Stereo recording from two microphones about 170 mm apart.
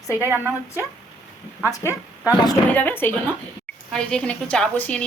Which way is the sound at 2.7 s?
10° left (ahead or behind).